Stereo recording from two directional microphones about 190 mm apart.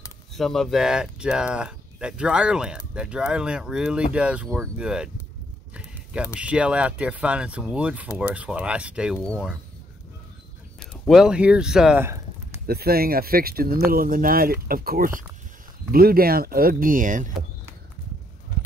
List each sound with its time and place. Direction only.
0.3 s speech: centre (ahead or behind)
6.3 s speech: 5° right (ahead or behind)
10.9 s speech: centre (ahead or behind)
12.6 s speech: 55° right (ahead or behind)